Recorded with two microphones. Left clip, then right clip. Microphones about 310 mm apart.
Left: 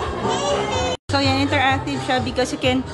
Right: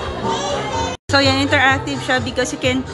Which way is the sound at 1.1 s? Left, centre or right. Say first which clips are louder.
Right 5 dB; centre.